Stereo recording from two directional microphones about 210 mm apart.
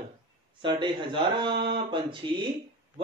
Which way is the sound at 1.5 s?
55° right (ahead or behind).